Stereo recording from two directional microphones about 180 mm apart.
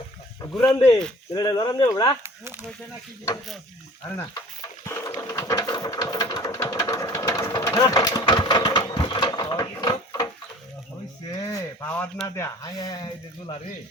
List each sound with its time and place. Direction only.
0.8 s speech: 20° left (ahead or behind)
4.9 s sewing machine: 15° left (ahead or behind)
11.3 s a sound: 20° left (ahead or behind)
11.9 s speech: 5° left (ahead or behind)
12.4 s speech: 20° left (ahead or behind)